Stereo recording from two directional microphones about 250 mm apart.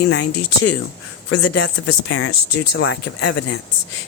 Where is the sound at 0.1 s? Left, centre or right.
Left.